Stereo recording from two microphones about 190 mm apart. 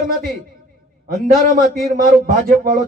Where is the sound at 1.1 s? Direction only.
45° right (ahead or behind).